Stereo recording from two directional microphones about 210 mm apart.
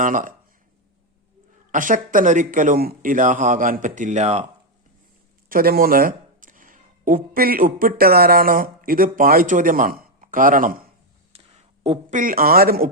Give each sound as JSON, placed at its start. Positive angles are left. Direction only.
{"t": 0.0, "sound": "speech", "side_deg": -40}
{"t": 1.7, "sound": "speech", "side_deg": -40}
{"t": 5.5, "sound": "speech", "side_deg": -45}
{"t": 11.3, "sound": "a sound", "side_deg": -30}
{"t": 12.2, "sound": "speech", "side_deg": -45}